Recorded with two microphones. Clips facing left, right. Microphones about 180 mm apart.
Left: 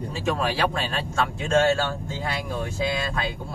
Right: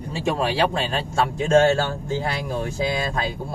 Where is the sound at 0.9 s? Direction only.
35° right (ahead or behind).